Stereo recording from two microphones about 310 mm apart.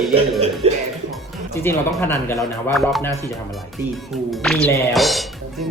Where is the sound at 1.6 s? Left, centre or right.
Centre.